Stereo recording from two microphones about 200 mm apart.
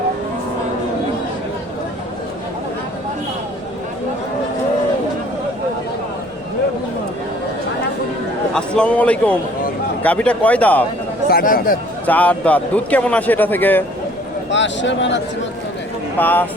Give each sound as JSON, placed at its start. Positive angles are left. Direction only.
{"t": 8.5, "sound": "a man's voice", "side_deg": 5}
{"t": 11.3, "sound": "speech", "side_deg": 50}
{"t": 12.0, "sound": "speech", "side_deg": 5}
{"t": 14.5, "sound": "speech", "side_deg": 65}
{"t": 16.1, "sound": "speech", "side_deg": 10}